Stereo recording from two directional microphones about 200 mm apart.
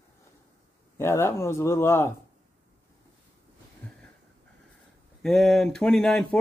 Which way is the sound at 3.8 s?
5° left (ahead or behind).